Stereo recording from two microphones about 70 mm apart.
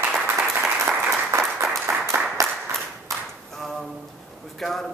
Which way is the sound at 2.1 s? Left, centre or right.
Right.